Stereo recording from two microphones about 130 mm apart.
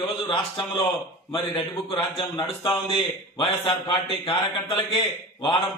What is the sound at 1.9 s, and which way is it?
A man's voice, 40° left (ahead or behind).